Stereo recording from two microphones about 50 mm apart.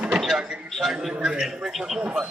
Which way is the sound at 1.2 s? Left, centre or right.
Centre.